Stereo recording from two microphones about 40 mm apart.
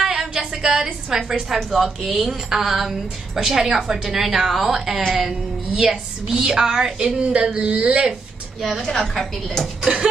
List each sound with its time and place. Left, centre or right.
0.0 s a sound: centre
1.1 s a woman's voice: centre; by 8.1 s right
8.8 s a woman's voice: centre